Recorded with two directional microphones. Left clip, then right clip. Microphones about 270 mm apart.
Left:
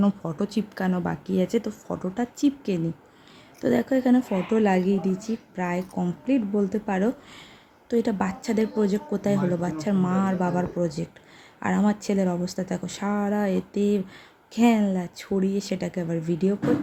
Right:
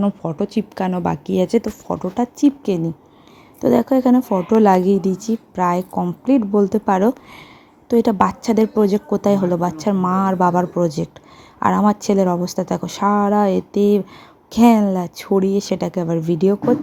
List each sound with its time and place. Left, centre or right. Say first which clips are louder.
0.0 s speech: right 5 dB; centre